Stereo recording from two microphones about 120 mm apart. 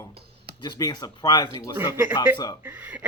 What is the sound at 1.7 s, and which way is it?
Speech, 15° right (ahead or behind).